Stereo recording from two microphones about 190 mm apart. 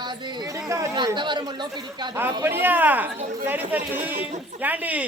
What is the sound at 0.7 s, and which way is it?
Speech, 20° right (ahead or behind).